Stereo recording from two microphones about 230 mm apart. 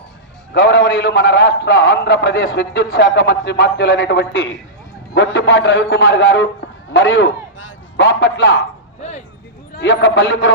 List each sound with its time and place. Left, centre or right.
0.6 s a man's voice: left
9.7 s a man's voice: left